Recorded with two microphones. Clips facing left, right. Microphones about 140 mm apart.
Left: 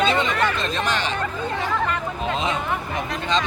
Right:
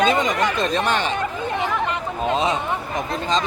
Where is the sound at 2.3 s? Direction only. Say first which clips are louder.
Right 3 dB; 35° right (ahead or behind).